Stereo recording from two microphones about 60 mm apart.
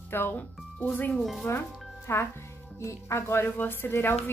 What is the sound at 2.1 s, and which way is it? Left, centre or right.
A woman's voice, left.